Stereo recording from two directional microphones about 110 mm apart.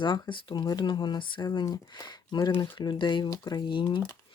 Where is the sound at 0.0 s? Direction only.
45° left (ahead or behind).